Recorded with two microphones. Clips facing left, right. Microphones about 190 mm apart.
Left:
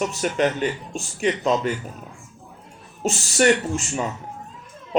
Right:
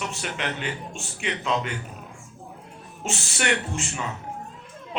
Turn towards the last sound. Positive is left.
turn(degrees=40)  # may be behind; listen again after turning